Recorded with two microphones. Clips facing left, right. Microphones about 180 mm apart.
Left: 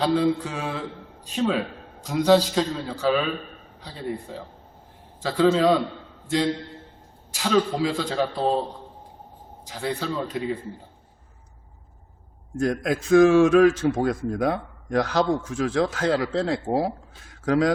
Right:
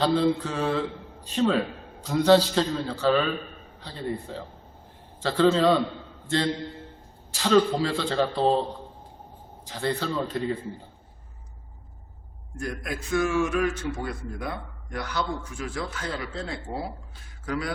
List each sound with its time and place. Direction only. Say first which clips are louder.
0.0 s a man's voice: left 1 dB; 5° left (ahead or behind)
7.3 s a man's voice: right 1 dB; 5° left (ahead or behind)
9.6 s a man's voice: even; 5° left (ahead or behind)
12.5 s a man's voice: left 9 dB; 90° left